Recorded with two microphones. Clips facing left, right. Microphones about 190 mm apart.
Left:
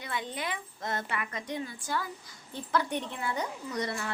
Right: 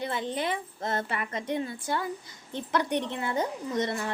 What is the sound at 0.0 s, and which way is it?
A woman's voice, 30° right (ahead or behind).